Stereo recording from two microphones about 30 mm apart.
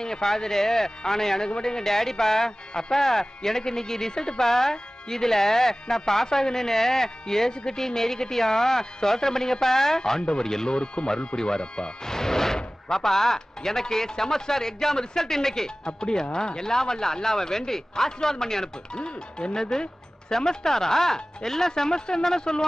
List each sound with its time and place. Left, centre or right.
0.0 s speech: centre
10.8 s speech: left
12.1 s music: centre
12.9 s speech: centre
16.0 s speech: left
18.9 s speech: left